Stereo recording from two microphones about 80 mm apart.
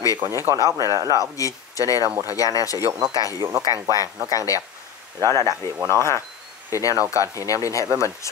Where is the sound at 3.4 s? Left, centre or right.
Right.